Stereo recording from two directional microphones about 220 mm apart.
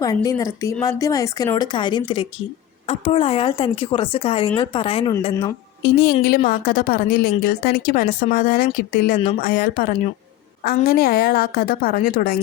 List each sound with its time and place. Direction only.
0.0 s speech: 15° left (ahead or behind)
5.8 s a woman's voice: 45° left (ahead or behind)